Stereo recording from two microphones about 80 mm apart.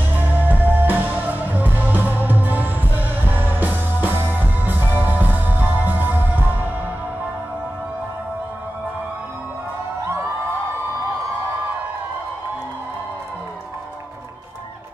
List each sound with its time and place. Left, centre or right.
0.1 s music: right